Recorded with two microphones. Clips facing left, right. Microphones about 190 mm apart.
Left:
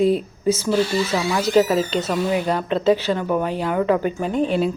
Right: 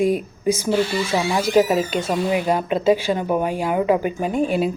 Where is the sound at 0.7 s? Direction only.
30° right (ahead or behind).